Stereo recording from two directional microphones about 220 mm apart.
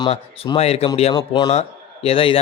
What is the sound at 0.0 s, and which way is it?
A man's voice, 25° left (ahead or behind).